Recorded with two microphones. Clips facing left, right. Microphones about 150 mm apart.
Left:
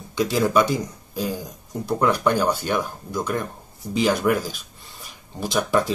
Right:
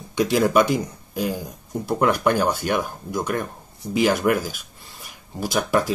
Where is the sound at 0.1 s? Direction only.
15° right (ahead or behind).